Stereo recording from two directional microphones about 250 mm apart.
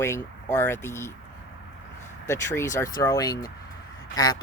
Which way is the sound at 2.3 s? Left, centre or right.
Centre.